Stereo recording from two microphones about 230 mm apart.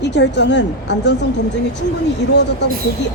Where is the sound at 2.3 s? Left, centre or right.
Left.